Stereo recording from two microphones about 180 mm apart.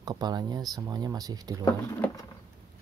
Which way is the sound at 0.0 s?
20° right (ahead or behind).